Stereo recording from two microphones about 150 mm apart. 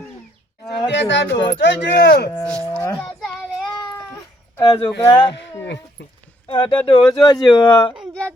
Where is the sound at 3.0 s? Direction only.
5° left (ahead or behind).